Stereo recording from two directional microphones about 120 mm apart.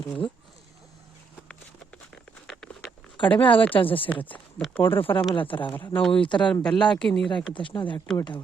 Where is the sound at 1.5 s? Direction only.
10° left (ahead or behind).